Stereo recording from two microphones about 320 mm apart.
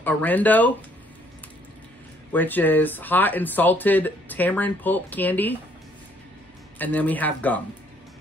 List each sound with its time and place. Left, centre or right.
0.0 s speech: centre
2.3 s speech: centre
6.8 s speech: centre